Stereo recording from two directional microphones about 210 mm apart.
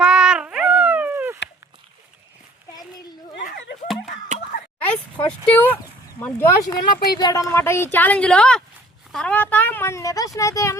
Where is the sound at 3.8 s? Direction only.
Centre (ahead or behind).